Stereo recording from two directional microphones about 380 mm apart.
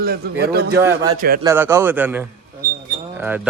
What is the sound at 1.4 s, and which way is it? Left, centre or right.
Speech, centre.